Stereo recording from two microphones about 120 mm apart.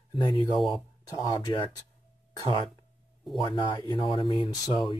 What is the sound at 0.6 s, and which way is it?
Speech, centre (ahead or behind).